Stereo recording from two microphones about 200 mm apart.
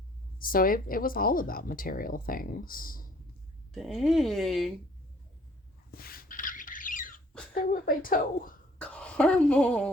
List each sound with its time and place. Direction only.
0.3 s speech: 45° left (ahead or behind)
3.7 s speech: centre (ahead or behind)
5.9 s a sound: 50° left (ahead or behind)
7.5 s speech: 45° left (ahead or behind)
8.8 s speech: 5° left (ahead or behind)